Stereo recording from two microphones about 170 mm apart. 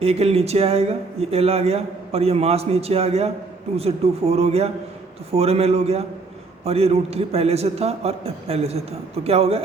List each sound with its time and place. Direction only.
0.0 s speech: 35° right (ahead or behind)